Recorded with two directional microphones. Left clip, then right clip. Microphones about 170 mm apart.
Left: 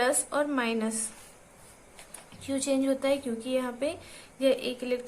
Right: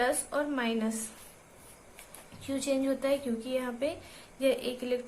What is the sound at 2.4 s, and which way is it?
A woman's voice, 20° left (ahead or behind).